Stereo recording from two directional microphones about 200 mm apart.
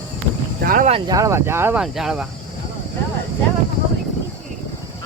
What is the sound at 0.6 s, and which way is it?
Speech, 45° right (ahead or behind).